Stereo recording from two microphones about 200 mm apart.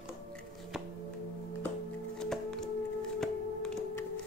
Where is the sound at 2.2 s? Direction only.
Centre (ahead or behind).